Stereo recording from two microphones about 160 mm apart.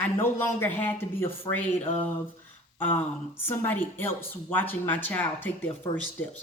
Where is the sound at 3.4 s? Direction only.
15° left (ahead or behind).